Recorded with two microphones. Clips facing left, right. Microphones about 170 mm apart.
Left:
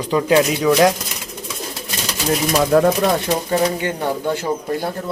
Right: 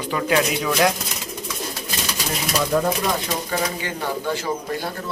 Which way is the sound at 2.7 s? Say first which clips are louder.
Left 7 dB; 70° left (ahead or behind).